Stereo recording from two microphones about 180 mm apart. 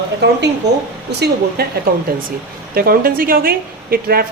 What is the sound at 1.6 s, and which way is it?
Speech, 60° right (ahead or behind).